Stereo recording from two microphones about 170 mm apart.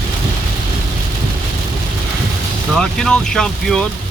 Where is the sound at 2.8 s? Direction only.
5° left (ahead or behind).